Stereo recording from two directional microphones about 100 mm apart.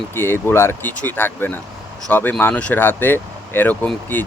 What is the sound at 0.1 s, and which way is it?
Speech, 25° left (ahead or behind).